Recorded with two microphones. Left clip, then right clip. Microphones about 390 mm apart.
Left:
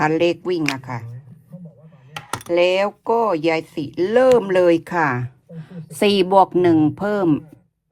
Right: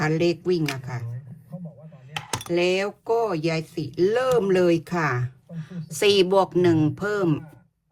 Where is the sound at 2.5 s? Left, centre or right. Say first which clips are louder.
Left 7 dB; centre.